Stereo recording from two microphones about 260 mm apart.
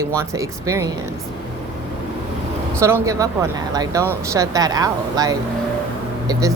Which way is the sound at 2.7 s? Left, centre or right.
Centre.